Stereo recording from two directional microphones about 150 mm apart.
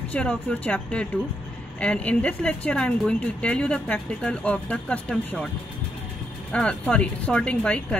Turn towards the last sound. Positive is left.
turn(degrees=5)  # may be behind; listen again after turning